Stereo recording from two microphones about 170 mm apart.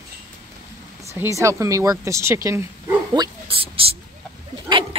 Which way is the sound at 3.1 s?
30° right (ahead or behind).